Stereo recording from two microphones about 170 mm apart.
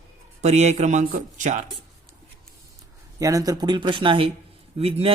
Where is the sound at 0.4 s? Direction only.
40° right (ahead or behind).